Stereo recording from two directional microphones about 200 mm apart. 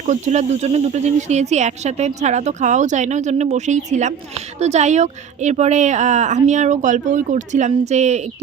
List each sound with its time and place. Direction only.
0.0 s speech: 35° right (ahead or behind)